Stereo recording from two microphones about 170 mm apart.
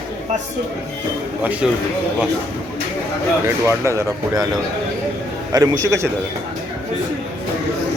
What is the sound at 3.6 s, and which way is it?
Speech, 15° right (ahead or behind).